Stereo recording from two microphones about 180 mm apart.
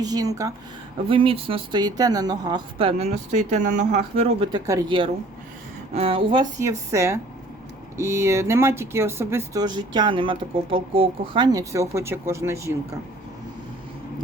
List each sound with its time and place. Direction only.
0.0 s speech: 20° right (ahead or behind)
1.0 s speech: 30° right (ahead or behind)
4.6 s speech: 20° right (ahead or behind)